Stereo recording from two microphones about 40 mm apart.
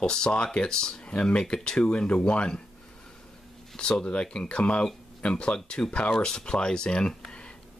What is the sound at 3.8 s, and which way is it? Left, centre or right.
Speech, left.